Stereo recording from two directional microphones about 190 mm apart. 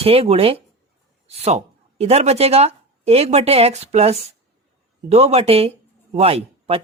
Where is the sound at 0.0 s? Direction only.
30° right (ahead or behind).